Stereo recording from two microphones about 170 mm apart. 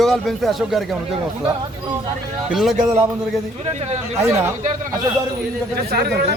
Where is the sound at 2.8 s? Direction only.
15° right (ahead or behind).